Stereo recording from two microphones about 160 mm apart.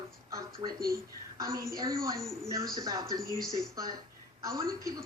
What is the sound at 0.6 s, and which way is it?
A woman's voice, 25° right (ahead or behind).